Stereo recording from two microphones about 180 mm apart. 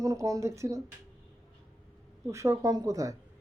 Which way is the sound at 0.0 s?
15° right (ahead or behind).